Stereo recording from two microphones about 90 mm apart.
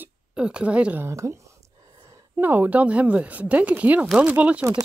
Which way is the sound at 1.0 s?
30° right (ahead or behind).